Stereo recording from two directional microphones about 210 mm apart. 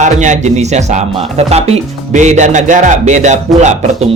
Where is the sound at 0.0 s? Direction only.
35° right (ahead or behind).